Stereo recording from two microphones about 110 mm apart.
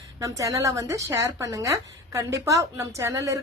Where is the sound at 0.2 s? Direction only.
30° right (ahead or behind).